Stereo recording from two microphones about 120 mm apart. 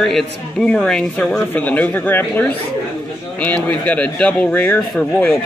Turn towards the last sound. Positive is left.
turn(degrees=10)  # may be behind; listen again after turning